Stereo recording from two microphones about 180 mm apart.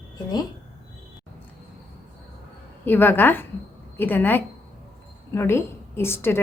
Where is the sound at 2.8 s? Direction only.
10° left (ahead or behind).